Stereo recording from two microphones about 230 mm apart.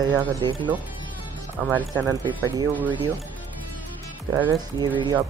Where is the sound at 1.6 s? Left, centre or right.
Centre.